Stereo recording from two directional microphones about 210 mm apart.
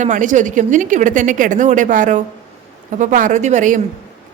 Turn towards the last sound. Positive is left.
turn(degrees=-35)  # may be behind; listen again after turning